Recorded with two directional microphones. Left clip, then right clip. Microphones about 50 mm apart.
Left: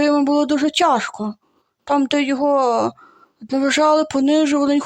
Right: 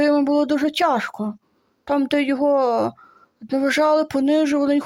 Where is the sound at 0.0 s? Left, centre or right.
Left.